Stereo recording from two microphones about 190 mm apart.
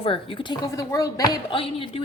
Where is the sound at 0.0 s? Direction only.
25° left (ahead or behind).